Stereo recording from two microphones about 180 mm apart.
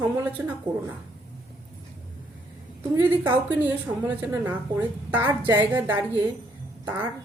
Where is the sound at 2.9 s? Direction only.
10° right (ahead or behind).